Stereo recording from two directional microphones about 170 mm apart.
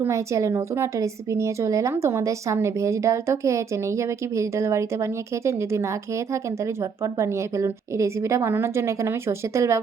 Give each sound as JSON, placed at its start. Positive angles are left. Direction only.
{"t": 0.0, "sound": "a woman's voice", "side_deg": -15}
{"t": 7.0, "sound": "a woman's voice", "side_deg": -20}